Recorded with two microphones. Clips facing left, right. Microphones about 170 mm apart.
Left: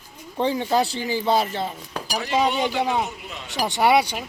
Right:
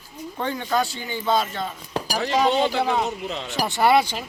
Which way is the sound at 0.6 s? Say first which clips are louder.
Left 2 dB; 30° left (ahead or behind).